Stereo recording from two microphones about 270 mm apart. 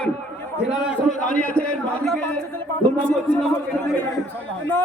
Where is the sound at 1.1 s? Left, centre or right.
Left.